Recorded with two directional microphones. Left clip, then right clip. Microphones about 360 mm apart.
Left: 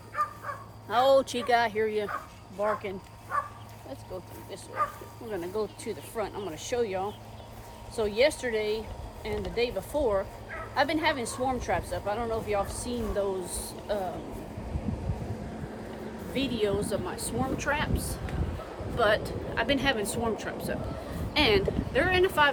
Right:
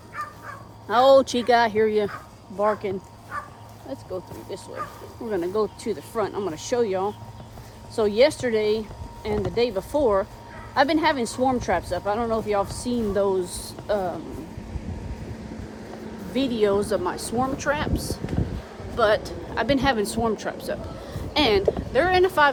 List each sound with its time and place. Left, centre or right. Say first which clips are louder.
0.2 s bow-wow: left 3 dB; centre
0.9 s speech: right 7 dB; right
3.3 s speech: left 3 dB; centre
5.3 s speech: right 8 dB; right
16.3 s speech: right 7 dB; centre
18.9 s speech: right 5 dB; centre